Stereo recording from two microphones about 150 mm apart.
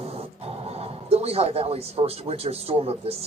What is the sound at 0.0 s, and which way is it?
Speech, 40° right (ahead or behind).